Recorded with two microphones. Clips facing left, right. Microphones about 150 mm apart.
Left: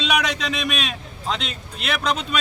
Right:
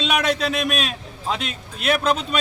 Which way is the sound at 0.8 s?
5° right (ahead or behind).